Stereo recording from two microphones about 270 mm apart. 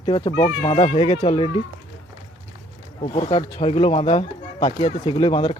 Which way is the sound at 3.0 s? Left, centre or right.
Centre.